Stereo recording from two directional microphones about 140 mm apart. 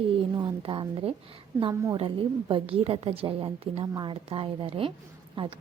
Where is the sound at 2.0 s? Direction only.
40° right (ahead or behind).